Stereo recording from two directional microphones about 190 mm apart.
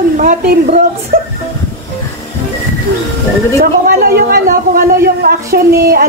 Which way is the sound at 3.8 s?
55° right (ahead or behind).